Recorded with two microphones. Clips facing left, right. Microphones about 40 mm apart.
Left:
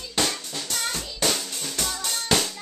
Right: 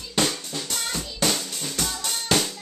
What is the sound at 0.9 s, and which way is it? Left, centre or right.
Music, centre.